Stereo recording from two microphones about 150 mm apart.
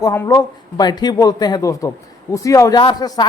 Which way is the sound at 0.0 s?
20° left (ahead or behind).